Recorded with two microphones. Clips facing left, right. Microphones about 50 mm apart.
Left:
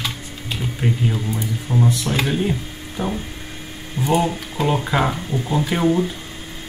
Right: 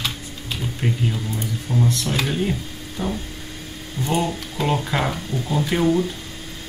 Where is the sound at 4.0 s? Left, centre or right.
Centre.